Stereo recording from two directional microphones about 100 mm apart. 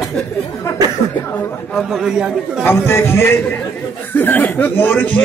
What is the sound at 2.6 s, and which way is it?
A man's voice, 25° left (ahead or behind).